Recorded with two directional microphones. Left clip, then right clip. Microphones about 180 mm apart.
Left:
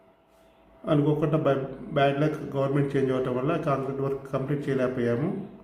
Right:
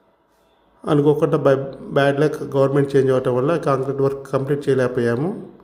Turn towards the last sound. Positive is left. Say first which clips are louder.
# right 8 dB
turn(degrees=-55)  # may be behind; listen again after turning